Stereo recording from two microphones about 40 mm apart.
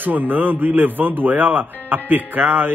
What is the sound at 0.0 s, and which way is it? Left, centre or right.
Speech, right.